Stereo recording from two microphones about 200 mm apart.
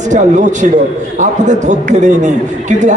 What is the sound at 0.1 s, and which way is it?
A man's voice, 35° right (ahead or behind).